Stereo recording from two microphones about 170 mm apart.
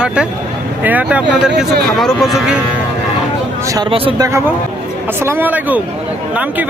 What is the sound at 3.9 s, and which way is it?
Speech, 30° right (ahead or behind).